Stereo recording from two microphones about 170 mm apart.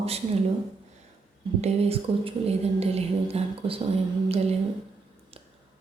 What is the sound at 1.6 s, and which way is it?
Speech, 35° right (ahead or behind).